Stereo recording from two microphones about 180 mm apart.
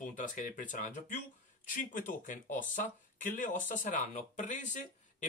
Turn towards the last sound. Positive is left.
turn(degrees=45)  # may be behind; listen again after turning